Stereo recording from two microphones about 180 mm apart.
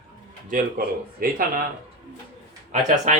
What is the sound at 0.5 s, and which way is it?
Speech, 50° right (ahead or behind).